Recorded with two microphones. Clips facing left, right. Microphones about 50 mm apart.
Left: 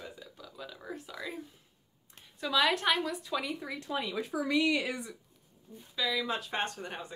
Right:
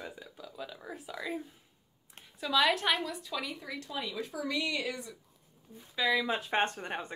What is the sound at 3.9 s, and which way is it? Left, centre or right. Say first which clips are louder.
Speech: left 4 dB; left.